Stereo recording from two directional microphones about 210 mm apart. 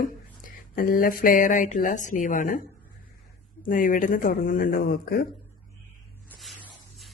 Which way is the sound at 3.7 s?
40° left (ahead or behind).